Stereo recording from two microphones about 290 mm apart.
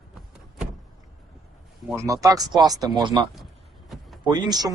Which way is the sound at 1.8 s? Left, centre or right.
Centre.